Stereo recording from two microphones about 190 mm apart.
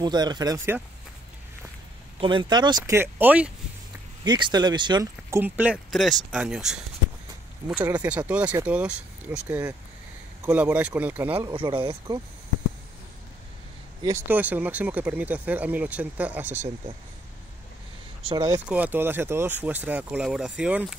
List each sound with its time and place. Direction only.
0.0 s speech: 20° right (ahead or behind)
2.1 s speech: 25° right (ahead or behind); by 3.5 s 10° right (ahead or behind)
4.2 s speech: 25° right (ahead or behind)
5.4 s speech: 5° right (ahead or behind)
8.3 s speech: 5° right (ahead or behind)
11.4 s speech: 25° right (ahead or behind)
14.0 s speech: 10° right (ahead or behind)
16.5 s speech: 35° right (ahead or behind)
18.2 s speech: 20° right (ahead or behind)
18.7 s speech: 10° right (ahead or behind)